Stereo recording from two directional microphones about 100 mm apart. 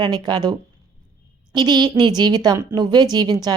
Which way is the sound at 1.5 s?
45° right (ahead or behind).